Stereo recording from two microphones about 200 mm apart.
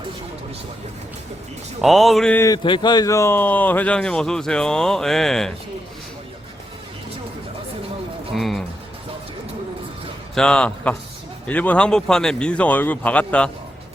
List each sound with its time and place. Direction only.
1.8 s speech: centre (ahead or behind)
2.4 s speech: 20° left (ahead or behind); by 5.5 s centre (ahead or behind)
8.3 s speech: centre (ahead or behind)
10.3 s speech: 5° left (ahead or behind)